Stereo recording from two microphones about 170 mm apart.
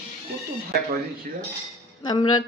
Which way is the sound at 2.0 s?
25° left (ahead or behind).